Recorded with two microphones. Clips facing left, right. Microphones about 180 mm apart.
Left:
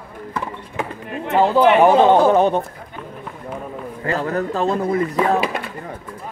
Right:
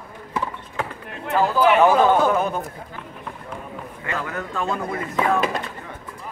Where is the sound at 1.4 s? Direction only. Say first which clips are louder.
Left 5 dB; 30° left (ahead or behind).